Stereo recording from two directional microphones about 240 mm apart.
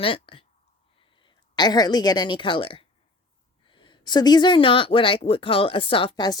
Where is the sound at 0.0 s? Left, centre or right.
Left.